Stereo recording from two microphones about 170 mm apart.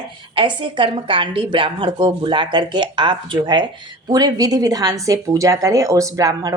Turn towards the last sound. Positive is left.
turn(degrees=-20)  # may be behind; listen again after turning